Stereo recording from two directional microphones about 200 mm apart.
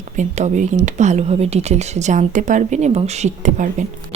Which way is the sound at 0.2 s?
35° right (ahead or behind).